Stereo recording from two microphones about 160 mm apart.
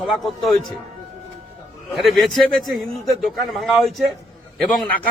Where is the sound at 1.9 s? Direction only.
Centre (ahead or behind).